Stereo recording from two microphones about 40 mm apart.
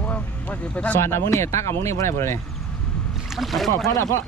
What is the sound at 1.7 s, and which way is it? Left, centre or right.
Speech, left.